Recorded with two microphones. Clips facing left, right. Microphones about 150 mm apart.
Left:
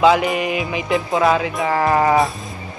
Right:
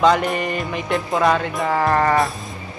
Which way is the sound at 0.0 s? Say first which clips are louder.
Left 2 dB; 5° left (ahead or behind).